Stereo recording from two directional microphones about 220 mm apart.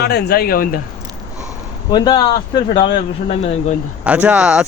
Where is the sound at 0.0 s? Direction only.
50° left (ahead or behind).